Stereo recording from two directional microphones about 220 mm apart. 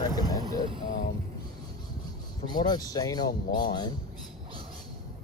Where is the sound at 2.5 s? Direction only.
20° left (ahead or behind).